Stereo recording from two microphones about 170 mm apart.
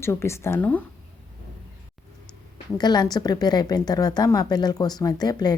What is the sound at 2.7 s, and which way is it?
A woman's voice, 25° left (ahead or behind).